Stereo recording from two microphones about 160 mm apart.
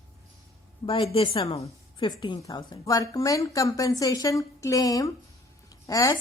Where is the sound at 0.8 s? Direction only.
35° left (ahead or behind).